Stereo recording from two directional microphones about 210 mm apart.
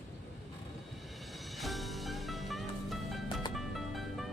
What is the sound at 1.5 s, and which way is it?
Music, centre (ahead or behind).